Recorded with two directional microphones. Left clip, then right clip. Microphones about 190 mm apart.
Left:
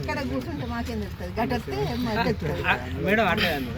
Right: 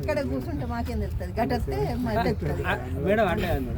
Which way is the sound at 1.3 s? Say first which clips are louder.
Even; 15° right (ahead or behind).